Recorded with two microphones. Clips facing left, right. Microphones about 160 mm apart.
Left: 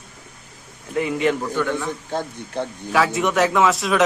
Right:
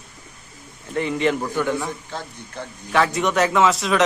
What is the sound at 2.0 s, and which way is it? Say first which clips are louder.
Speech: left 7 dB; 50° left (ahead or behind).